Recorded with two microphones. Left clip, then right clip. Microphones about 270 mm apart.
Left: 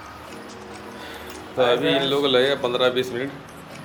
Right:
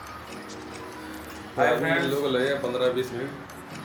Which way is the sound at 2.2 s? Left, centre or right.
Centre.